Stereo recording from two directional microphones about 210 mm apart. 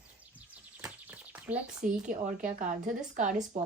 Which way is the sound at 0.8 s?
10° right (ahead or behind).